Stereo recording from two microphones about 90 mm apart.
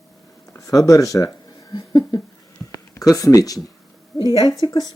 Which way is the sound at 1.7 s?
50° left (ahead or behind).